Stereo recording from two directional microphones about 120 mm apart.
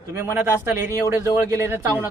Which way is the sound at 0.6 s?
20° right (ahead or behind).